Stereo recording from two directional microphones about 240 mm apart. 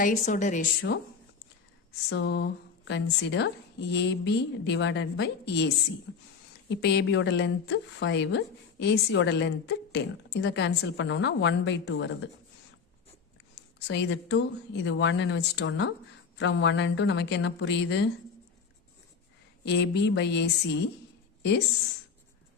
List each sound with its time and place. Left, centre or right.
0.0 s speech: left
0.9 s speech: left
2.0 s speech: left
13.7 s speech: left
19.6 s speech: left